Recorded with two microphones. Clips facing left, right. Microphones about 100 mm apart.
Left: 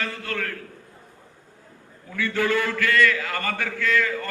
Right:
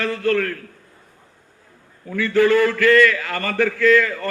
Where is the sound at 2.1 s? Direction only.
45° right (ahead or behind).